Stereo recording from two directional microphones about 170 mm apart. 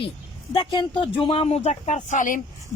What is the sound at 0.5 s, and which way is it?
A woman's voice, 25° left (ahead or behind).